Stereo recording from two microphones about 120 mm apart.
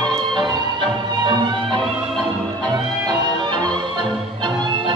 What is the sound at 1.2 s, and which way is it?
Music, 40° right (ahead or behind).